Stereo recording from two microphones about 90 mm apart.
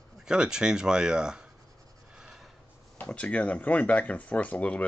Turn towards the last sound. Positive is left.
turn(degrees=15)  # may be behind; listen again after turning